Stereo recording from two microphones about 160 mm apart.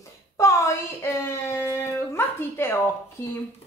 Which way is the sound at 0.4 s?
20° left (ahead or behind).